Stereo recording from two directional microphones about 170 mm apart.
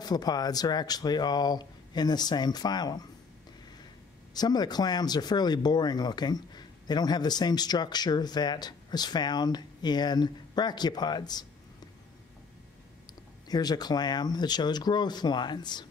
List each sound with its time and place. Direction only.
0.0 s speech: 25° left (ahead or behind)
4.3 s speech: 25° left (ahead or behind)
13.5 s speech: 25° left (ahead or behind)